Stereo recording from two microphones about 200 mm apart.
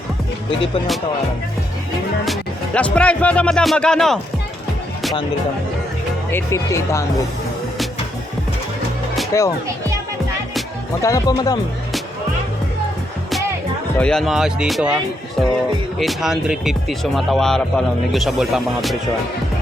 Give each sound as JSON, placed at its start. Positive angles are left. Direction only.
{"t": 2.2, "sound": "speech", "side_deg": 5}
{"t": 6.3, "sound": "speech", "side_deg": 15}
{"t": 9.3, "sound": "speech", "side_deg": 15}
{"t": 11.0, "sound": "speech", "side_deg": 15}
{"t": 14.0, "sound": "speech", "side_deg": 5}
{"t": 16.0, "sound": "speech", "side_deg": 0}